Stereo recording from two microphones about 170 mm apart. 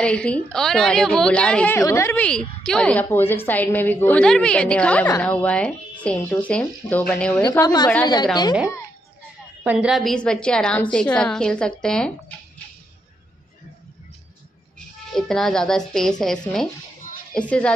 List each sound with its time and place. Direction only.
0.0 s a woman's voice: 5° left (ahead or behind)
1.8 s a woman's voice: 15° left (ahead or behind)
7.6 s a woman's voice: 25° left (ahead or behind)
9.6 s a woman's voice: 5° right (ahead or behind)
15.1 s a woman's voice: centre (ahead or behind)